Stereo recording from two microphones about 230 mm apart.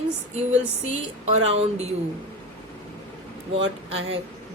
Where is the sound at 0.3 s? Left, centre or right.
Right.